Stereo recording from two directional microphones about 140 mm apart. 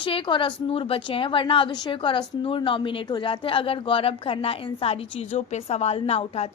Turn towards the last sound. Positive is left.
turn(degrees=45)  # may be behind; listen again after turning